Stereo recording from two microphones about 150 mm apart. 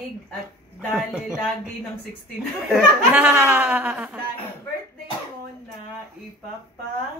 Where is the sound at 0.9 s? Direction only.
Centre (ahead or behind).